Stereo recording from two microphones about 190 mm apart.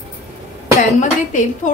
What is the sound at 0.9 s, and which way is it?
Speech, 40° left (ahead or behind).